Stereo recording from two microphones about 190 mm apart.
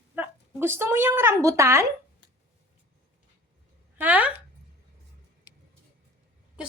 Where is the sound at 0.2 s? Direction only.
10° right (ahead or behind).